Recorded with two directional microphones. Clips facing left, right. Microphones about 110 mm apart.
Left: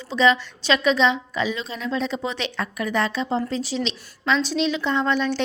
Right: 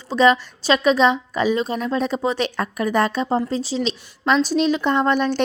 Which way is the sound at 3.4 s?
30° right (ahead or behind).